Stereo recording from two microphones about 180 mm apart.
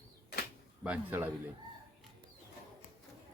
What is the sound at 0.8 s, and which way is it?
Speech, 10° right (ahead or behind).